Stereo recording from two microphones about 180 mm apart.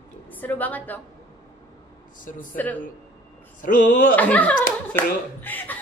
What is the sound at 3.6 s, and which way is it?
Speech, 45° left (ahead or behind).